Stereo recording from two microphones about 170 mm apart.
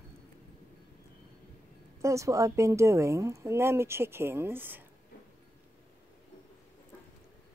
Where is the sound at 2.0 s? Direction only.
20° right (ahead or behind).